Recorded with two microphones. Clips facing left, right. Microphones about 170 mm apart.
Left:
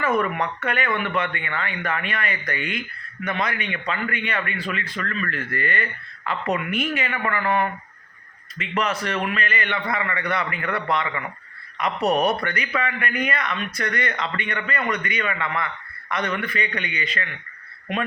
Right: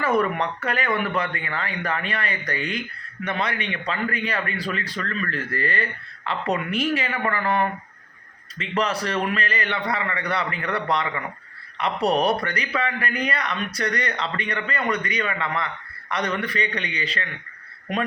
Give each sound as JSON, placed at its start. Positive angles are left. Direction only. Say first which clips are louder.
{"t": 0.0, "sound": "a man's voice", "louder": "right 1 dB", "side_deg": -35}
{"t": 8.5, "sound": "a man's voice", "louder": "right 1 dB", "side_deg": -30}